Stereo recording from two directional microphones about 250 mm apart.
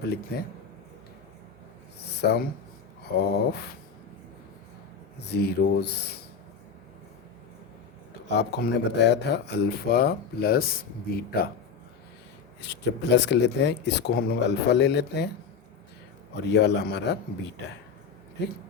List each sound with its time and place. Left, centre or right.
2.0 s speech: left
5.2 s speech: left
8.3 s speech: left
12.6 s speech: left
16.3 s speech: left